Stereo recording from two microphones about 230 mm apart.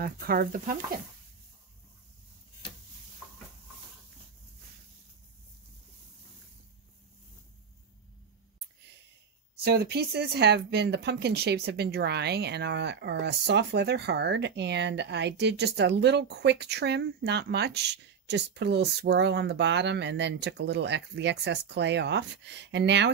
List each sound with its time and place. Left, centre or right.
0.0 s speech: right
9.7 s speech: right